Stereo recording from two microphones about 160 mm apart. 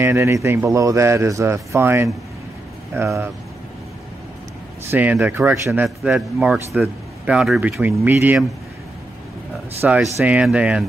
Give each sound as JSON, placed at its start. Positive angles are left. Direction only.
{"t": 0.0, "sound": "speech", "side_deg": -15}
{"t": 4.9, "sound": "speech", "side_deg": -10}
{"t": 9.8, "sound": "speech", "side_deg": -10}